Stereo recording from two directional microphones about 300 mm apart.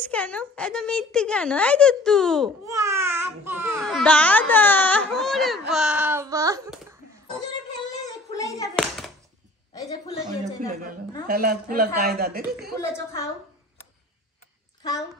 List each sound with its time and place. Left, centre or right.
0.1 s speech: centre
2.6 s speech: centre
5.7 s a sound: centre
8.1 s a sound: centre
10.2 s speech: right
14.8 s a woman's voice: centre